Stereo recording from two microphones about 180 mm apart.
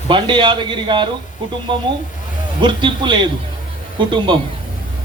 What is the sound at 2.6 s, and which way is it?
A man's voice, 25° right (ahead or behind).